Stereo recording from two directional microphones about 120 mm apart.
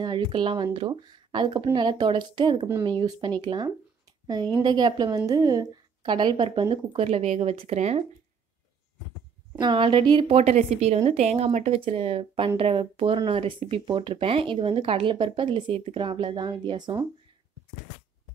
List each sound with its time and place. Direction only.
0.0 s a woman's voice: 40° right (ahead or behind); by 8.0 s 65° right (ahead or behind)
9.6 s a woman's voice: 40° right (ahead or behind)
10.2 s a woman's voice: 65° right (ahead or behind); by 17.0 s 35° right (ahead or behind)